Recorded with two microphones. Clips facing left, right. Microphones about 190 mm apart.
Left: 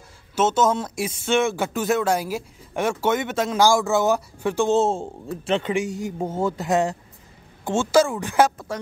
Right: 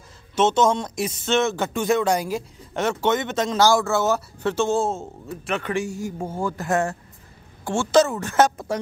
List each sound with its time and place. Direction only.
0.4 s a woman's voice: 5° left (ahead or behind)